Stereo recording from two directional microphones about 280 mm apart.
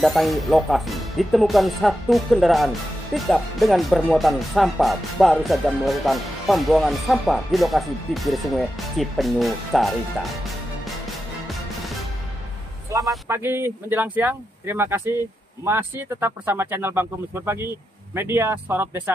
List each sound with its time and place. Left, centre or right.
0.0 s speech: centre
11.4 s music: centre
13.1 s speech: centre